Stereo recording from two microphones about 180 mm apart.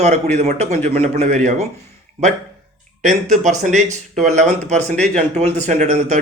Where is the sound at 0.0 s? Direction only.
40° right (ahead or behind).